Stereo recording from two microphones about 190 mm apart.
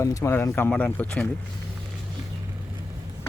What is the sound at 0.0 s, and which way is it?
Speech, 15° left (ahead or behind).